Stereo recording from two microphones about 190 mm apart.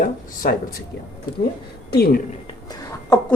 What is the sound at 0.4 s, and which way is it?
Speech, 50° left (ahead or behind).